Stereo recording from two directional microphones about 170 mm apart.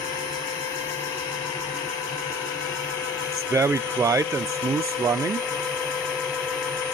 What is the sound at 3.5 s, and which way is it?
Speech, 15° right (ahead or behind).